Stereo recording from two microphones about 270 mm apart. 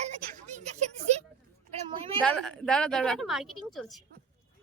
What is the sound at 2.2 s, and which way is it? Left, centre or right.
A woman's voice, centre.